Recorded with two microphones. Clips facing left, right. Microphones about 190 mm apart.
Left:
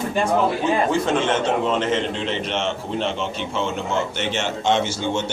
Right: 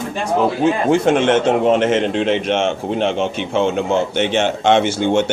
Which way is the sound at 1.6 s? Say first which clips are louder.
Right 7 dB; 65° right (ahead or behind).